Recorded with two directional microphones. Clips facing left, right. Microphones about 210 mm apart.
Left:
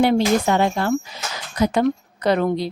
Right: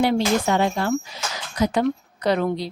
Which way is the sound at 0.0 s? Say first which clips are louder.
Left 3 dB; 55° left (ahead or behind).